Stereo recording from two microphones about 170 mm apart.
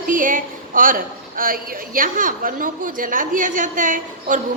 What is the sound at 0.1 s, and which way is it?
A woman's voice, 50° right (ahead or behind).